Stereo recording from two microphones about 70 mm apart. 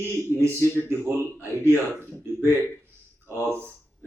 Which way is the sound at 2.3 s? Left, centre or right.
Right.